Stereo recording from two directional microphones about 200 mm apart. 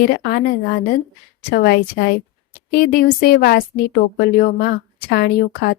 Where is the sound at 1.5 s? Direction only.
50° left (ahead or behind).